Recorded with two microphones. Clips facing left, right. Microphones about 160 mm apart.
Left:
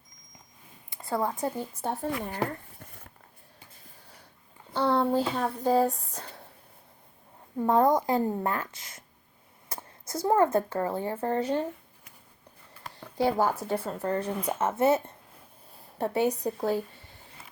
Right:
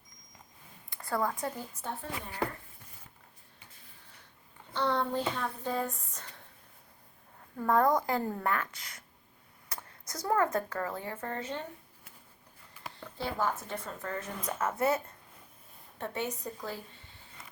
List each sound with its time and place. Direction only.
0.9 s speech: 20° left (ahead or behind)
4.7 s speech: 30° left (ahead or behind)
7.5 s a woman's voice: 20° left (ahead or behind)
13.2 s a woman's voice: 35° left (ahead or behind)
16.6 s speech: 65° left (ahead or behind)